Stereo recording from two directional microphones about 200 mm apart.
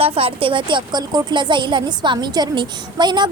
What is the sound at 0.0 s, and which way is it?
A woman's voice, 30° right (ahead or behind).